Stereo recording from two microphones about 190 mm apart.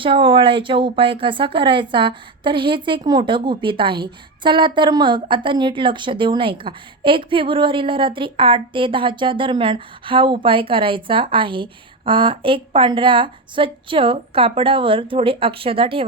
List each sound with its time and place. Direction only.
0.0 s a woman's voice: 25° right (ahead or behind)